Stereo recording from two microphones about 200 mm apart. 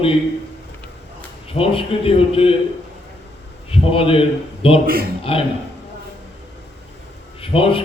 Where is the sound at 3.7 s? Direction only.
25° left (ahead or behind).